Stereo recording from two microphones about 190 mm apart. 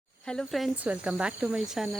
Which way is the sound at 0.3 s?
Centre (ahead or behind).